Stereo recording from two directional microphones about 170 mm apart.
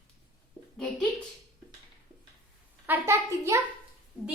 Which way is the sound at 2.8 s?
15° right (ahead or behind).